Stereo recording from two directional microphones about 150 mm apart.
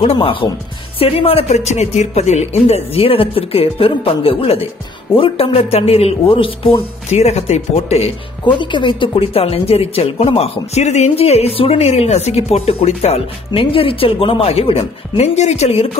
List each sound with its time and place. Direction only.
0.0 s speech: 40° left (ahead or behind)